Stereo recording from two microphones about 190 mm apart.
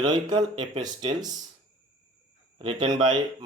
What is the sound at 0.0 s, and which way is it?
Speech, 25° right (ahead or behind).